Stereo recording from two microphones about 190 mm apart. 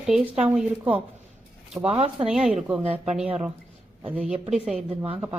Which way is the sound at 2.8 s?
30° right (ahead or behind).